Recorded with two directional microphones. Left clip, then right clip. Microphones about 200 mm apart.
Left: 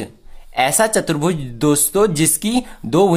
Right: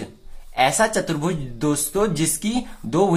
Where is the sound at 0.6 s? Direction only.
30° left (ahead or behind).